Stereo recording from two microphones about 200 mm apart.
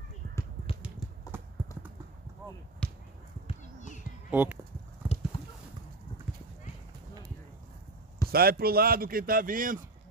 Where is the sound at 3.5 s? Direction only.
40° left (ahead or behind).